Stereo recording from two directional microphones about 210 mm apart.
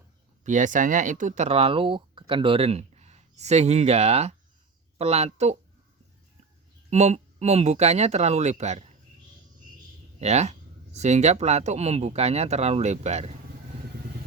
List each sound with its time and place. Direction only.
0.4 s speech: 35° right (ahead or behind)
6.9 s speech: 35° right (ahead or behind)
10.2 s speech: 30° right (ahead or behind)